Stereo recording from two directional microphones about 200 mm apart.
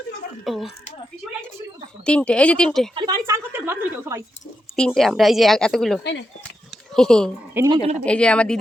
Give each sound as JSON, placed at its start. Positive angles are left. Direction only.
{"t": 0.4, "sound": "speech", "side_deg": 0}
{"t": 2.0, "sound": "speech", "side_deg": 5}
{"t": 2.9, "sound": "a woman's voice", "side_deg": -20}
{"t": 4.8, "sound": "speech", "side_deg": 0}
{"t": 6.0, "sound": "speech", "side_deg": 60}
{"t": 6.9, "sound": "speech", "side_deg": 5}
{"t": 7.5, "sound": "speech", "side_deg": -15}
{"t": 8.0, "sound": "speech", "side_deg": 5}